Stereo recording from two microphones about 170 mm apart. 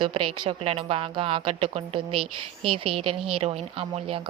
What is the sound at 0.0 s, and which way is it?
Speech, 30° right (ahead or behind).